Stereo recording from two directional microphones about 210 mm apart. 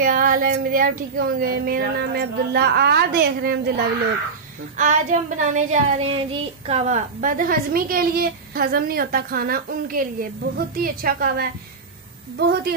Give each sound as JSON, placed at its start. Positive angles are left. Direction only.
{"t": 0.0, "sound": "a woman's voice", "side_deg": -40}
{"t": 4.7, "sound": "child singing", "side_deg": -35}
{"t": 6.7, "sound": "a woman's voice", "side_deg": -35}